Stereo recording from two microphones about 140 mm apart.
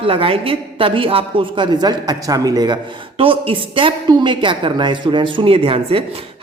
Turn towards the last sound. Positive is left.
turn(degrees=-40)  # may be behind; listen again after turning